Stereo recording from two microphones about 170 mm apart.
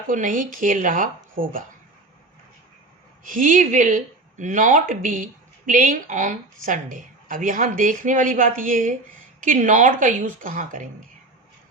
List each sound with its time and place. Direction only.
0.1 s speech: 50° right (ahead or behind)
3.2 s speech: 50° right (ahead or behind)